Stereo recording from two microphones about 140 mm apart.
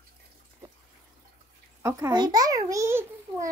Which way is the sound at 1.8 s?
25° right (ahead or behind).